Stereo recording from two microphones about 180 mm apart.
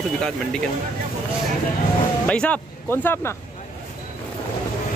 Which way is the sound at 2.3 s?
5° left (ahead or behind).